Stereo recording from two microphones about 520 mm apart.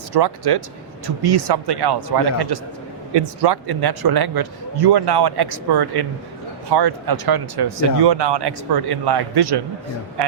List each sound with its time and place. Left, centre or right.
0.1 s a man's voice: right